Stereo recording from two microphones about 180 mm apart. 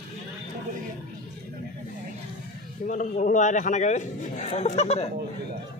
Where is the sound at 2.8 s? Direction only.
45° left (ahead or behind).